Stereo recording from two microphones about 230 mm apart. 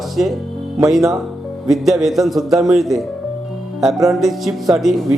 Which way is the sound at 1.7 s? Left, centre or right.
Centre.